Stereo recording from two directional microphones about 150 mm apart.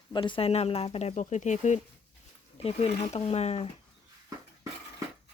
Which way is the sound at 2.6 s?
40° left (ahead or behind).